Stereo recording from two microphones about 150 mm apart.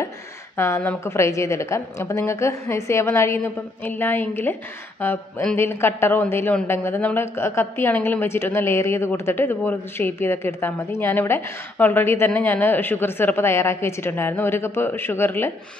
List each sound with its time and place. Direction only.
0.6 s a woman's voice: 15° left (ahead or behind)